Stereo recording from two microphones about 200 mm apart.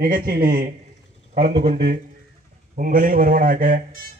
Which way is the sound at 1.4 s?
30° right (ahead or behind).